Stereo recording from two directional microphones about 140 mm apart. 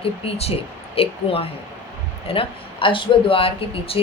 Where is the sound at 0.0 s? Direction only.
45° left (ahead or behind).